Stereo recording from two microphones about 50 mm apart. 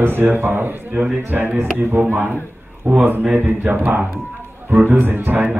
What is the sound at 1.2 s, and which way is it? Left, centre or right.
A man's voice, right.